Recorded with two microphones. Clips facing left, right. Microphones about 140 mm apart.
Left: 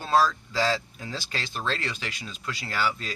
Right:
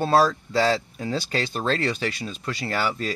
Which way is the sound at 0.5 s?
35° right (ahead or behind).